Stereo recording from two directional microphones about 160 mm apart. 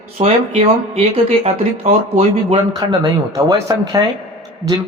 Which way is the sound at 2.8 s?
25° right (ahead or behind).